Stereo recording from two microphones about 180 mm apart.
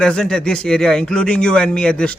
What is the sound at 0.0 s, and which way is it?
Speech, 5° left (ahead or behind).